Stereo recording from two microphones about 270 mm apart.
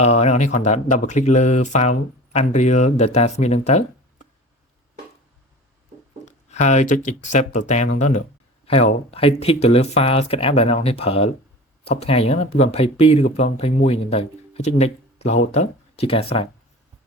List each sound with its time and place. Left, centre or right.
0.0 s speech: left
6.2 s speech: left